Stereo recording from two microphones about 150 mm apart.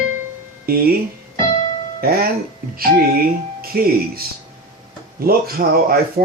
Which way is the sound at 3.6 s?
85° right.